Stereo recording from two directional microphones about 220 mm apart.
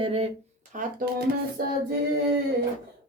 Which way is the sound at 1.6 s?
45° right (ahead or behind).